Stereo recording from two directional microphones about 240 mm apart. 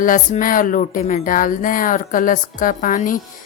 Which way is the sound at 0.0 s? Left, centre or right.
Left.